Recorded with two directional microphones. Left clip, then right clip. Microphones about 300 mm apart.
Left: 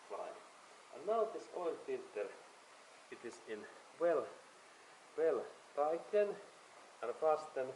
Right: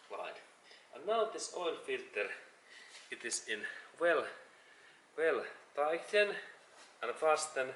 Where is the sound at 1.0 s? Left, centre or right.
Left.